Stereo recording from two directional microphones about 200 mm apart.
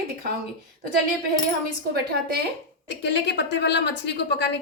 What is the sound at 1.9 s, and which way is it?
Speech, 50° right (ahead or behind).